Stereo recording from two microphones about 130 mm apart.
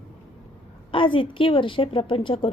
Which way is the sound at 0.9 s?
40° left (ahead or behind).